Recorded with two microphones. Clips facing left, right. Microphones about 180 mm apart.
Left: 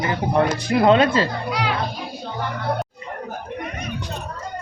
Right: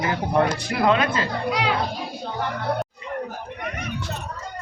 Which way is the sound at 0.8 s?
30° left (ahead or behind).